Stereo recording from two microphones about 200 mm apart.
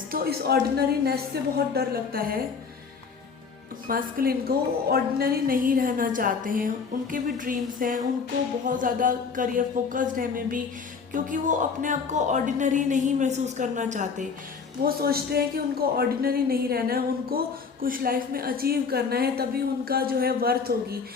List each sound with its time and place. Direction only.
0.1 s a woman's voice: 50° right (ahead or behind)
3.8 s a woman's voice: 45° right (ahead or behind)
14.8 s a woman's voice: 50° right (ahead or behind)